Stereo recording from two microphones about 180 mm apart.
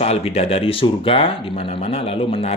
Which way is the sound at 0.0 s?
35° left (ahead or behind).